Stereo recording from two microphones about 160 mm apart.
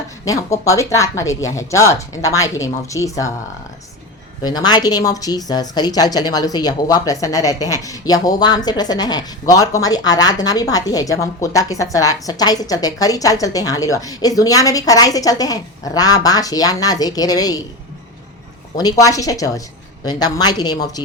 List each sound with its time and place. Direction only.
0.3 s speech: 20° left (ahead or behind)
4.4 s speech: 25° left (ahead or behind)
18.8 s speech: 25° left (ahead or behind)